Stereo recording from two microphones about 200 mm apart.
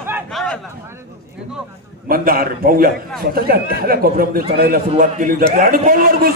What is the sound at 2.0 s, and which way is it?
A man's voice, 45° right (ahead or behind).